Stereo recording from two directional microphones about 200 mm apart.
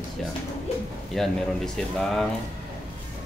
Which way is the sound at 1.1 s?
Centre (ahead or behind).